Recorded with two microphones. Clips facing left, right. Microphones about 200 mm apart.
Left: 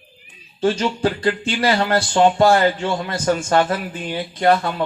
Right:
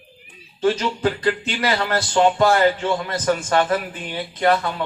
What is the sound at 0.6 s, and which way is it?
Speech, 30° left (ahead or behind).